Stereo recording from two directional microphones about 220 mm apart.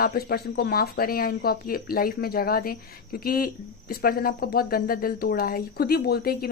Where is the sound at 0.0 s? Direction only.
45° left (ahead or behind).